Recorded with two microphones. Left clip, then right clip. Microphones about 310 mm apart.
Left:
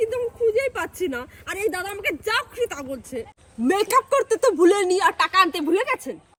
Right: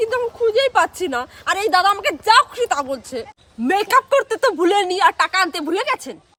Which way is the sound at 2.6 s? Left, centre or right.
Right.